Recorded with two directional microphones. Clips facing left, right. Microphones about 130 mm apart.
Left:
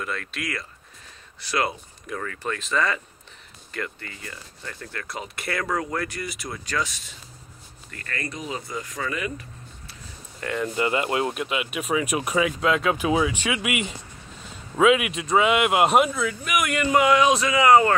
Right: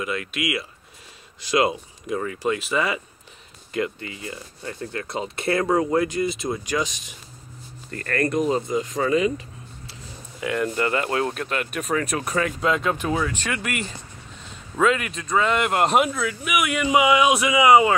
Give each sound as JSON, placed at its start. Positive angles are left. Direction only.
{"t": 0.0, "sound": "speech", "side_deg": -5}
{"t": 7.9, "sound": "speech", "side_deg": -50}
{"t": 8.6, "sound": "speech", "side_deg": -20}
{"t": 10.4, "sound": "speech", "side_deg": 0}
{"t": 10.8, "sound": "speech", "side_deg": 15}